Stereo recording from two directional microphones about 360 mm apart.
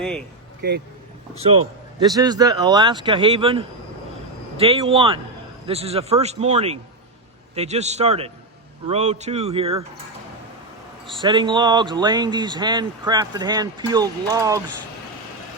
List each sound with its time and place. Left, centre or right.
0.6 s speech: right
1.4 s speech: centre
11.2 s speech: centre